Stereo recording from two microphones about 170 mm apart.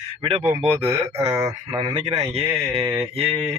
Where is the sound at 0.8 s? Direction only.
15° right (ahead or behind).